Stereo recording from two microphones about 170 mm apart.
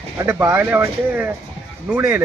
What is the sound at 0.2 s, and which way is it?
Speech, 15° right (ahead or behind).